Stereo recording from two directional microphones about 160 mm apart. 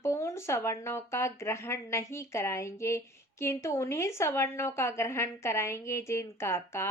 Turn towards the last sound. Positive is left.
turn(degrees=15)  # may be behind; listen again after turning